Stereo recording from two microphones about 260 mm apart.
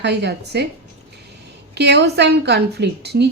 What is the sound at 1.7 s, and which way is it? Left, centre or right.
A woman's voice, right.